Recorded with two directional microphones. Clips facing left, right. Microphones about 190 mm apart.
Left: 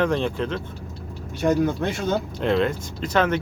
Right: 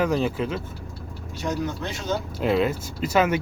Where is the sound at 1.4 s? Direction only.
55° left (ahead or behind).